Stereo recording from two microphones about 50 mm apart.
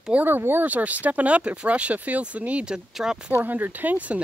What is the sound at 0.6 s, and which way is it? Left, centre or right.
Speech, right.